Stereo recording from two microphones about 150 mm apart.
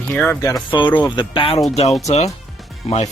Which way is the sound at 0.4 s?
30° left (ahead or behind).